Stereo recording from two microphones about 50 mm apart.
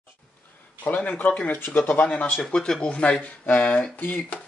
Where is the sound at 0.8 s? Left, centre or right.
Left.